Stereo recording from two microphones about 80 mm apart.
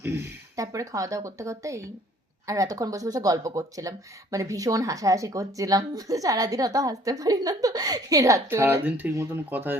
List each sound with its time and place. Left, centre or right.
0.0 s speech: right
0.5 s speech: right
8.4 s speech: right